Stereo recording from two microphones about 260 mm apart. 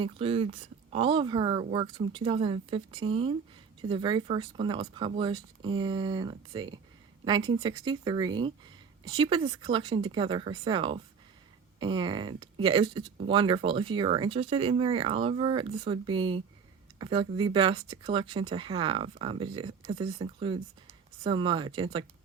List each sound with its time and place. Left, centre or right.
0.0 s speech: right